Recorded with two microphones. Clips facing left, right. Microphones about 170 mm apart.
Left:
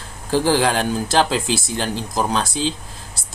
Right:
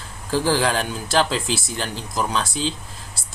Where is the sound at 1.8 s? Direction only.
45° left (ahead or behind).